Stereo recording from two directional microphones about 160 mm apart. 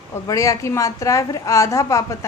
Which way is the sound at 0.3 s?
20° left (ahead or behind).